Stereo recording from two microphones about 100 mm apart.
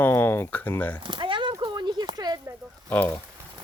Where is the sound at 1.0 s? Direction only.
55° right (ahead or behind).